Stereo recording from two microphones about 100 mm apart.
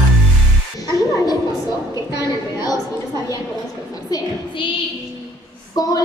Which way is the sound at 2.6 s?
40° left (ahead or behind).